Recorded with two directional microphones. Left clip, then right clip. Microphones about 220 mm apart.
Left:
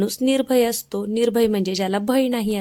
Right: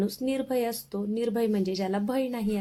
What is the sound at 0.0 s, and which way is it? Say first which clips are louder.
A woman's voice: left 9 dB; 45° left (ahead or behind).